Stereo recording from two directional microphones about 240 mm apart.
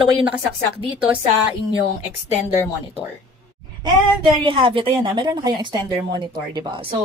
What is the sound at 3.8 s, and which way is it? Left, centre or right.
A woman's voice, centre.